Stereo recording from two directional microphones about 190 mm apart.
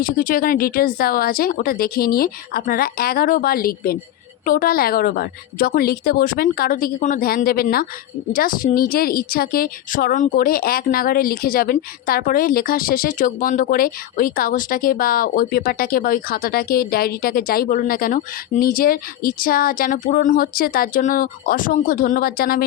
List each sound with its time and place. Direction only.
0.0 s a woman's voice: 45° left (ahead or behind)